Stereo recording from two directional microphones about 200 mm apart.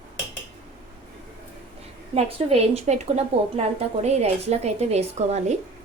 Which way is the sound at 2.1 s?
30° right (ahead or behind).